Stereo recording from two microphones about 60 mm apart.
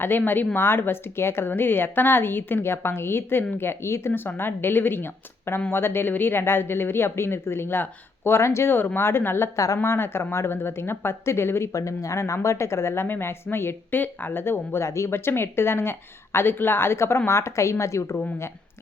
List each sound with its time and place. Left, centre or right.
0.0 s speech: left
11.7 s speech: left